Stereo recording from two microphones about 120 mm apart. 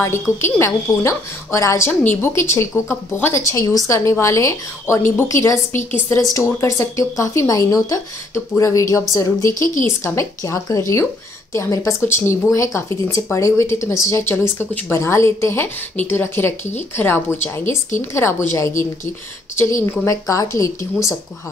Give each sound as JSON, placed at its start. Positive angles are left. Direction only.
{"t": 0.0, "sound": "a woman's voice", "side_deg": 20}
{"t": 19.9, "sound": "speech", "side_deg": 25}